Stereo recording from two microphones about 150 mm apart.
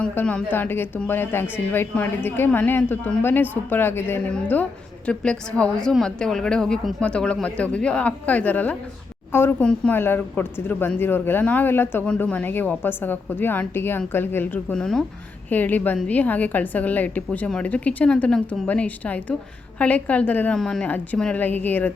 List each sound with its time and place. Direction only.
0.0 s speech: 10° left (ahead or behind)